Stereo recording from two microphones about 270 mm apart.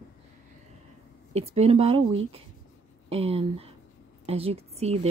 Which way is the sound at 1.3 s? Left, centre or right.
Right.